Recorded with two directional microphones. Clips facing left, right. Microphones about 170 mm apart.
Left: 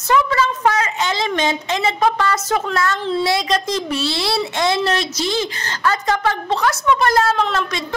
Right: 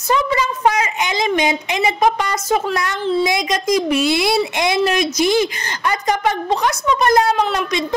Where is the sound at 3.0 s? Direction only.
Centre (ahead or behind).